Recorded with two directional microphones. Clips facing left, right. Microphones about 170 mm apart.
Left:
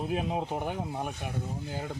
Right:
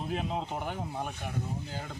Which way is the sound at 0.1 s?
15° left (ahead or behind).